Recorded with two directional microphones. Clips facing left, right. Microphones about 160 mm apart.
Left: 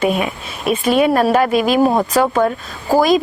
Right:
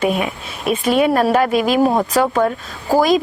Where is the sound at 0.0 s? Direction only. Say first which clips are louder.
Left 1 dB; 15° left (ahead or behind).